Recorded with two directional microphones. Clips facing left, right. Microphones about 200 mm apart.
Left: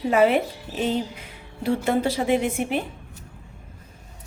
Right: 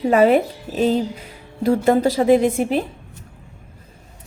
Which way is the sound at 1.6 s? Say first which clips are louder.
Right 6 dB; 40° right (ahead or behind).